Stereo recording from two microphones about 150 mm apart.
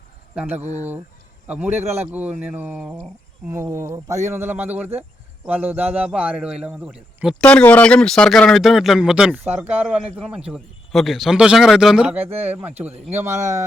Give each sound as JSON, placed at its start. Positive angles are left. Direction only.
{"t": 0.3, "sound": "a man's voice", "side_deg": -10}
{"t": 7.4, "sound": "a man's voice", "side_deg": 10}